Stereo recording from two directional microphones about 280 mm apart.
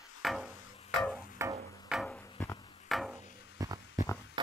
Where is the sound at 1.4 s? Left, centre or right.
Centre.